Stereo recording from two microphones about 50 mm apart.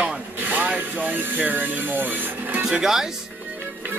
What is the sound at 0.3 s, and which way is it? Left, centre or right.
Speech, right.